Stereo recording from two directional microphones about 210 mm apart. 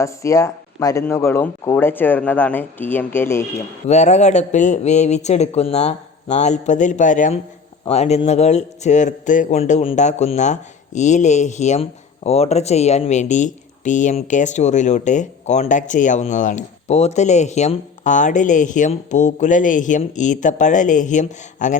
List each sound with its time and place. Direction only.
0.0 s speech: 15° left (ahead or behind)
3.8 s a man's voice: 35° left (ahead or behind)